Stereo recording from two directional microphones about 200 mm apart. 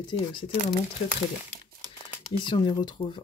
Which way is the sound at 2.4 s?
20° left (ahead or behind).